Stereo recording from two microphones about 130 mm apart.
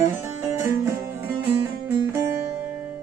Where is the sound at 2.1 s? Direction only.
20° right (ahead or behind).